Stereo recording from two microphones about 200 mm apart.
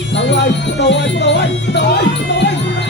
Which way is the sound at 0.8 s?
60° left (ahead or behind).